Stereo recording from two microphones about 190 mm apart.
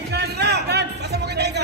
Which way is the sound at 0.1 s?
60° right (ahead or behind).